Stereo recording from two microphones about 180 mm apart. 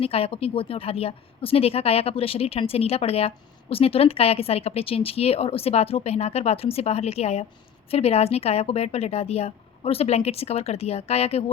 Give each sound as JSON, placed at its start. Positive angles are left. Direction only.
{"t": 0.0, "sound": "a woman's voice", "side_deg": 30}